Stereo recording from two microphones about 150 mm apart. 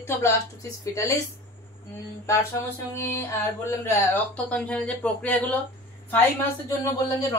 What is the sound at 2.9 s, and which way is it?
Speech, 15° left (ahead or behind).